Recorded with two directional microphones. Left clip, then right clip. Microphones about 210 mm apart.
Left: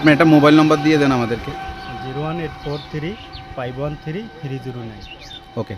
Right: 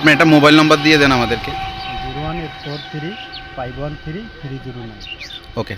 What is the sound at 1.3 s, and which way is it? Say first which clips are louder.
Speech: right 5 dB; 50° left (ahead or behind).